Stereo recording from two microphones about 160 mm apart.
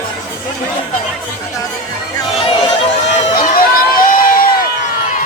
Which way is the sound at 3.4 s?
60° left (ahead or behind).